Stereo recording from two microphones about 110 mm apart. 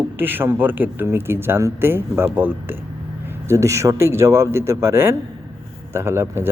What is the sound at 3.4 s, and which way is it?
A man's voice, 25° right (ahead or behind).